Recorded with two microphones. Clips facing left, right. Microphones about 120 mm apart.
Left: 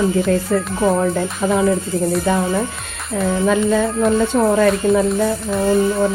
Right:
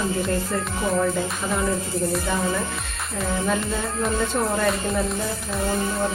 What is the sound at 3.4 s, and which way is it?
A woman's voice, 90° left.